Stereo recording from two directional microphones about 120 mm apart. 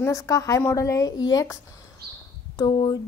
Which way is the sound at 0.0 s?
25° left (ahead or behind).